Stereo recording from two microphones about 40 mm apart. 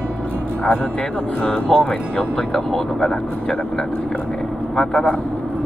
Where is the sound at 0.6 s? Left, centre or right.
Left.